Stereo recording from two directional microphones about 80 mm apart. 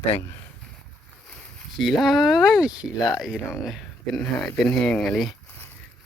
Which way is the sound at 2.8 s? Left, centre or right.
Left.